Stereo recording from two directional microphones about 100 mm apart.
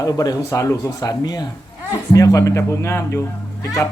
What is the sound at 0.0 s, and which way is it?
Speech, 35° left (ahead or behind).